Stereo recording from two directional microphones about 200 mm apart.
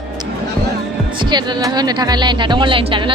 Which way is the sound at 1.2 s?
20° right (ahead or behind).